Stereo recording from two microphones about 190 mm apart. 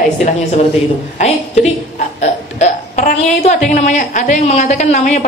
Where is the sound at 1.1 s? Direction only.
35° left (ahead or behind).